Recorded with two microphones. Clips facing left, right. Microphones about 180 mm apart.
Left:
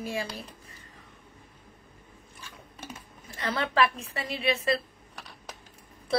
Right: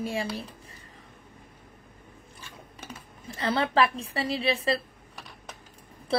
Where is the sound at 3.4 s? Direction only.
30° right (ahead or behind).